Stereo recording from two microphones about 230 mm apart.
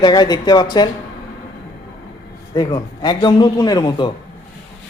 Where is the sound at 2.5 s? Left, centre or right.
Centre.